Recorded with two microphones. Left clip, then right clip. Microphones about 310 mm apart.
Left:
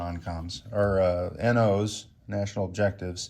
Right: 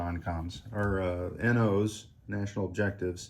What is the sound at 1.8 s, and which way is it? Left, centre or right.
Speech, centre.